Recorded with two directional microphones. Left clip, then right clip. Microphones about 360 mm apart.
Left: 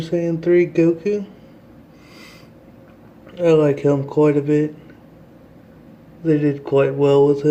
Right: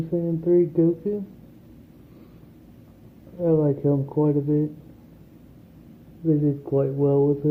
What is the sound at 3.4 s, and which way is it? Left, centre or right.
Speech, centre.